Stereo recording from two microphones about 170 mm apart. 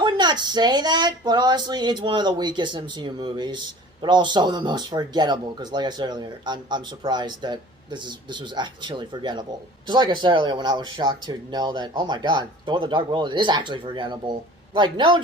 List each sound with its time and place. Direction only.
0.0 s speech: 25° right (ahead or behind)